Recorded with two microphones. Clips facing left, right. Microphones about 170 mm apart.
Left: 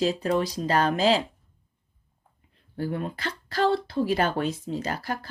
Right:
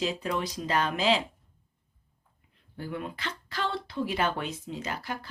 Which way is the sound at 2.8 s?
40° left (ahead or behind).